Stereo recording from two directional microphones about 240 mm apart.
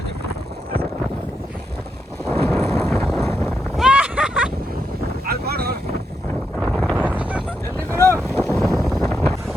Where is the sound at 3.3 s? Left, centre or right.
Centre.